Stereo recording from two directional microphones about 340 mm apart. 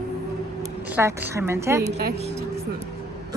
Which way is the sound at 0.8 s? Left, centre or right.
Centre.